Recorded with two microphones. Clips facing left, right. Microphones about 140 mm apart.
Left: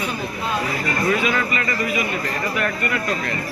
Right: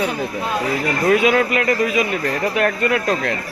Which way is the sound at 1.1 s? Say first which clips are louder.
Right 7 dB; 60° right (ahead or behind).